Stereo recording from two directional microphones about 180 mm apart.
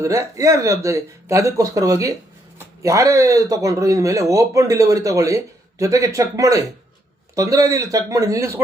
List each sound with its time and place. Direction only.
0.0 s speech: 15° right (ahead or behind)